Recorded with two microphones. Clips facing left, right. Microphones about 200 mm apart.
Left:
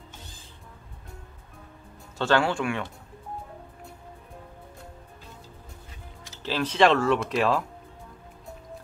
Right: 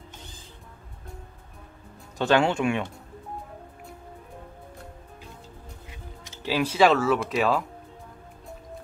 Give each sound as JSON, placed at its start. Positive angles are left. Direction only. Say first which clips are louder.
{"t": 2.1, "sound": "speech", "louder": "right 2 dB", "side_deg": -20}
{"t": 6.4, "sound": "speech", "louder": "right 1 dB", "side_deg": -10}